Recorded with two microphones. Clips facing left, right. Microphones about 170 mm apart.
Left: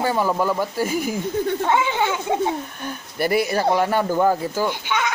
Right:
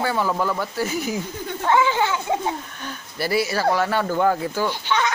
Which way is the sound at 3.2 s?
50° left (ahead or behind).